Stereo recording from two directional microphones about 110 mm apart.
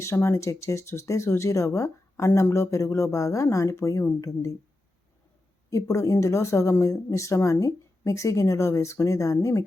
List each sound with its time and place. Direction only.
0.0 s speech: 25° left (ahead or behind)
5.7 s speech: 30° left (ahead or behind)